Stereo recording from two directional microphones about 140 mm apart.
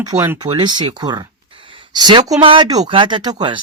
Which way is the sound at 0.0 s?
25° right (ahead or behind).